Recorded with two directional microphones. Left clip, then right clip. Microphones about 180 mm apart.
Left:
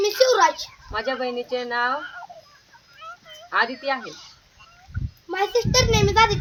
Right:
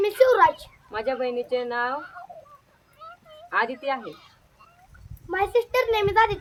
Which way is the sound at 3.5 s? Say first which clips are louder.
Left 2 dB; 15° right (ahead or behind).